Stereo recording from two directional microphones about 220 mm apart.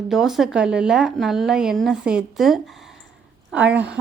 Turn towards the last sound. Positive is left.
turn(degrees=-5)  # may be behind; listen again after turning